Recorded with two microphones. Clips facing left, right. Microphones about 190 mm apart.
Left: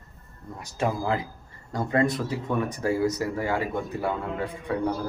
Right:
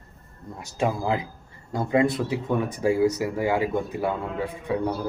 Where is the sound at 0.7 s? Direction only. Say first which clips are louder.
Right 2 dB; 15° right (ahead or behind).